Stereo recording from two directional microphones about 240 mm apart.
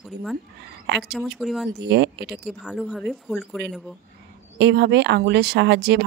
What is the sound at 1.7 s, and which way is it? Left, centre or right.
Speech, right.